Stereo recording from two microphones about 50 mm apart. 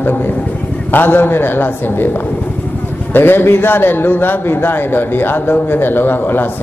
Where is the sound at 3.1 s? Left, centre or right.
Left.